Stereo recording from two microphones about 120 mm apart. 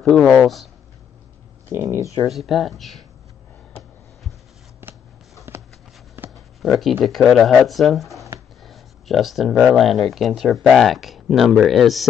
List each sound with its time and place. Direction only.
0.4 s speech: centre (ahead or behind)
1.7 s speech: 25° right (ahead or behind)
2.2 s speech: centre (ahead or behind)
5.5 s a sound: 20° right (ahead or behind)
6.6 s speech: centre (ahead or behind)